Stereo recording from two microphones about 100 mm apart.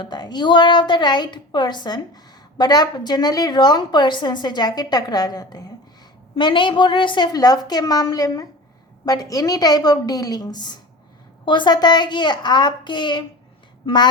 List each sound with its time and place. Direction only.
0.0 s a woman's voice: 45° left (ahead or behind)
6.3 s a woman's voice: 55° left (ahead or behind)
7.3 s a woman's voice: 40° left (ahead or behind)